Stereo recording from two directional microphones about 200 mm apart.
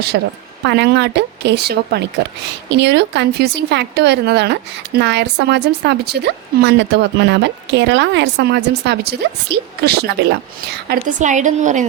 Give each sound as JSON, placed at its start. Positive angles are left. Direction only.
{"t": 0.1, "sound": "speech", "side_deg": -55}
{"t": 11.2, "sound": "a woman's voice", "side_deg": -35}